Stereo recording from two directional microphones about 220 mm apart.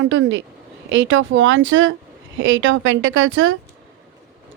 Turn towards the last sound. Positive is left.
turn(degrees=-60)  # may be behind; listen again after turning